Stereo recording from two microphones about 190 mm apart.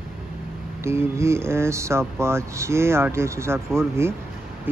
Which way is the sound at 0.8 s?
15° right (ahead or behind).